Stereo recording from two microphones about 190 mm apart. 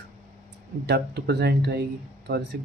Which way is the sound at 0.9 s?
60° right (ahead or behind).